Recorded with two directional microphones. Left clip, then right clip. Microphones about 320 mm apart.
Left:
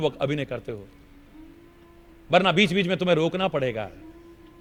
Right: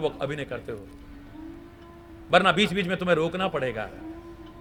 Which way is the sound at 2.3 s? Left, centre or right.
Left.